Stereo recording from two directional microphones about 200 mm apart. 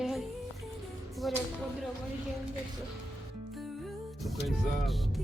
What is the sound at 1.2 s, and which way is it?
Speech, centre (ahead or behind).